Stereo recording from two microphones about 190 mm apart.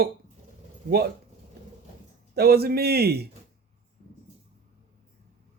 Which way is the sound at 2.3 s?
55° right (ahead or behind).